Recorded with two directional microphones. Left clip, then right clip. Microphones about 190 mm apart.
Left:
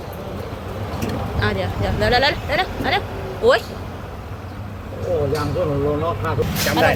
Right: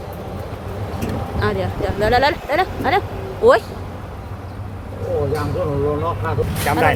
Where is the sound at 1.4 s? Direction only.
25° right (ahead or behind).